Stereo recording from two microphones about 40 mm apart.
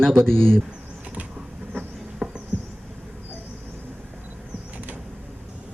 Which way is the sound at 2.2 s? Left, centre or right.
Centre.